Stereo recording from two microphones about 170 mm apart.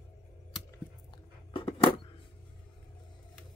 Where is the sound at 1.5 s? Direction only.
30° left (ahead or behind).